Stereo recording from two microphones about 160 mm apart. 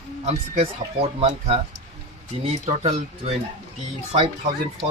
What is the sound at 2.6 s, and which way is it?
Speech, 40° right (ahead or behind).